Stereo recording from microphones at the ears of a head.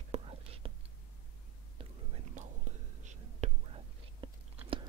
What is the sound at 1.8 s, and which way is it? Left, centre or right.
Whispering, right.